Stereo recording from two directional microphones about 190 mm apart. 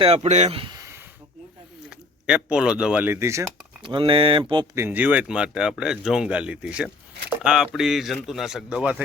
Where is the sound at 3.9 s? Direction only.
25° right (ahead or behind).